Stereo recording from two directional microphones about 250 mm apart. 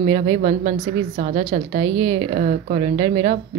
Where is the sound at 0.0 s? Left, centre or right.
Right.